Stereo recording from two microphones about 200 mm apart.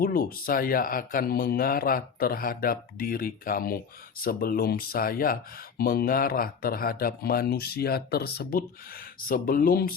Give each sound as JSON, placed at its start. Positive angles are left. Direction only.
{"t": 0.0, "sound": "speech", "side_deg": 45}